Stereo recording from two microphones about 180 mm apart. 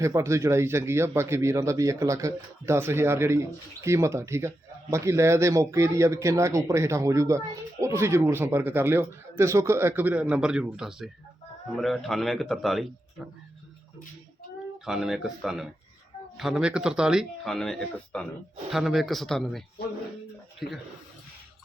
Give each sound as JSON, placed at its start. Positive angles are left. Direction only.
{"t": 0.0, "sound": "speech", "side_deg": -15}
{"t": 14.8, "sound": "speech", "side_deg": 0}